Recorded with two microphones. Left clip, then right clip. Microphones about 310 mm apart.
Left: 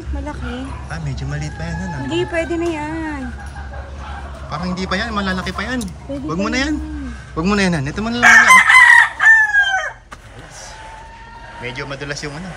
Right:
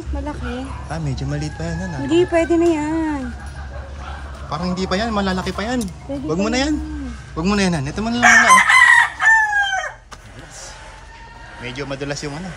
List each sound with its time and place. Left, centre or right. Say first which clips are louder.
0.8 s speech: right 2 dB; centre
2.0 s speech: right 4 dB; right
4.5 s speech: even; centre
8.3 s chicken: left 3 dB; right
11.6 s speech: even; centre